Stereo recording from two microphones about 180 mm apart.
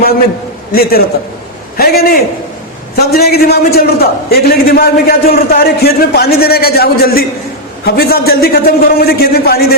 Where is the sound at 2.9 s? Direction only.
60° left (ahead or behind).